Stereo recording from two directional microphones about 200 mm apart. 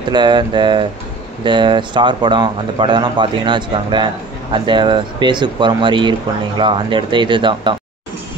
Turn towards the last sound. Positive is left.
turn(degrees=-25)  # may be behind; listen again after turning